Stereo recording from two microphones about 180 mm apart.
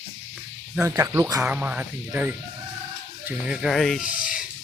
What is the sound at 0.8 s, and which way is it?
Speech, 15° right (ahead or behind).